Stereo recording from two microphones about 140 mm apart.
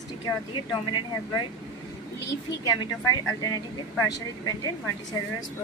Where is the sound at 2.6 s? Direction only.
25° left (ahead or behind).